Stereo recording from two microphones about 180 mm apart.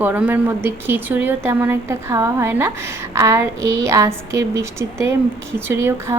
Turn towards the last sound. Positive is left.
turn(degrees=-15)  # may be behind; listen again after turning